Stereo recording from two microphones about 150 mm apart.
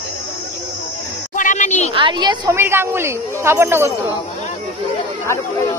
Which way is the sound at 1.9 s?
30° right (ahead or behind).